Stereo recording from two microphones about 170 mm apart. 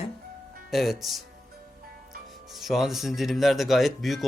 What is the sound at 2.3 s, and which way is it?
Speech, centre (ahead or behind).